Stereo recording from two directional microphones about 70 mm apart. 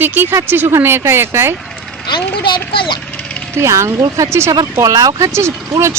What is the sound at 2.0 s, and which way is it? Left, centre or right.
Speech, left.